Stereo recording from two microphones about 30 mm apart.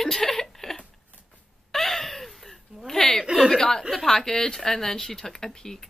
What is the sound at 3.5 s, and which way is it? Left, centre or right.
A woman's voice, centre.